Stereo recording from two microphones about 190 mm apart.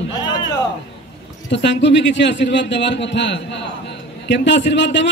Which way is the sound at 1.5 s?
70° left (ahead or behind).